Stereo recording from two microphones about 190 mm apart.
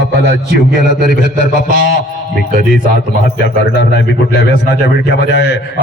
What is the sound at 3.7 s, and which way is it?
A man's voice, 65° left (ahead or behind).